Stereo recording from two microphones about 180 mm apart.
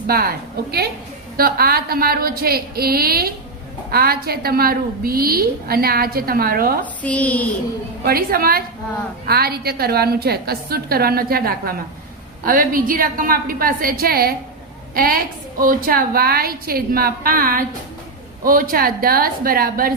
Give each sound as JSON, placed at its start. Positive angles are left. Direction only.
{"t": 0.1, "sound": "a woman's voice", "side_deg": -55}
{"t": 6.8, "sound": "speech", "side_deg": 10}
{"t": 8.0, "sound": "a woman's voice", "side_deg": -55}